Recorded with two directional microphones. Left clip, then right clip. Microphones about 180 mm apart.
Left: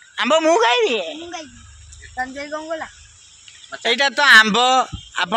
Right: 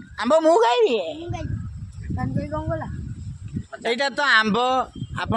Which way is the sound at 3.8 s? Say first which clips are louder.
Left 6 dB; 10° left (ahead or behind).